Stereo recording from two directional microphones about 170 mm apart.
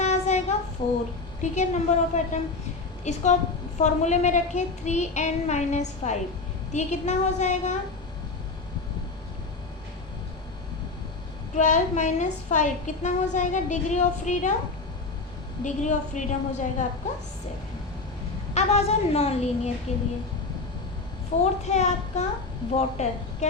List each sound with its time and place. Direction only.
0.0 s child singing: 40° left (ahead or behind)
0.8 s a woman's voice: 30° left (ahead or behind)
1.4 s a woman's voice: 45° left (ahead or behind)
11.5 s a woman's voice: 45° left (ahead or behind)
15.6 s a woman's voice: 45° left (ahead or behind)
18.5 s a woman's voice: 40° left (ahead or behind)
21.3 s a woman's voice: 40° left (ahead or behind)